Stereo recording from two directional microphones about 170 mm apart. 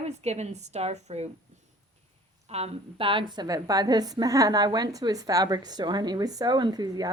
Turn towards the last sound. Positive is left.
turn(degrees=-20)  # may be behind; listen again after turning